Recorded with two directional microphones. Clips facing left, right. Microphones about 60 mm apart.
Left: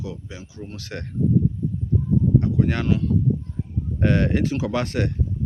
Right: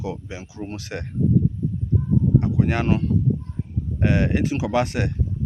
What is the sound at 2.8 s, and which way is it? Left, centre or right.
Speech, right.